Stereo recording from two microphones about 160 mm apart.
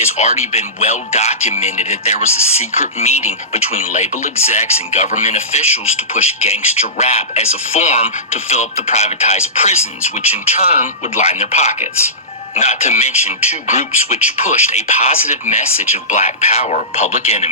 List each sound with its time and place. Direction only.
0.1 s speech: 45° left (ahead or behind)